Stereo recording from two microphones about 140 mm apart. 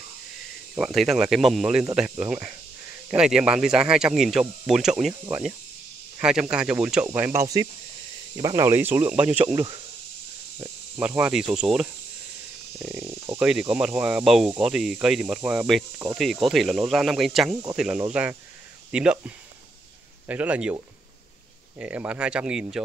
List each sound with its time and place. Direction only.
0.7 s speech: centre (ahead or behind)
6.2 s speech: 5° right (ahead or behind)
7.1 s speech: 15° right (ahead or behind)
8.6 s speech: 15° right (ahead or behind)
11.0 s speech: 10° right (ahead or behind)
12.7 s speech: 15° right (ahead or behind)
21.7 s speech: 10° right (ahead or behind)